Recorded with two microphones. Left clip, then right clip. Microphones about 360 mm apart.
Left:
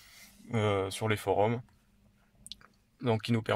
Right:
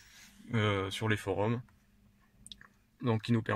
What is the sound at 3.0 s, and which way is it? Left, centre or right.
Speech, left.